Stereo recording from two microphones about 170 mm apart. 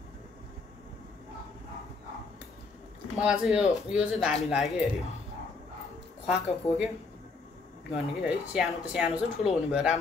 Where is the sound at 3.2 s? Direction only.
5° right (ahead or behind).